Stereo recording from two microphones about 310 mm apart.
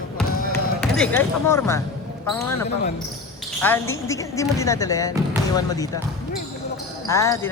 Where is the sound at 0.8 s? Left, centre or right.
Centre.